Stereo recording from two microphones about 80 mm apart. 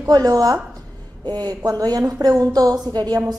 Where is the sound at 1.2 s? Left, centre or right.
Right.